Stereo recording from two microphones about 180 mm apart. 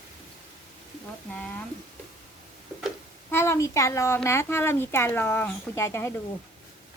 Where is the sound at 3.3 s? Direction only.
15° left (ahead or behind).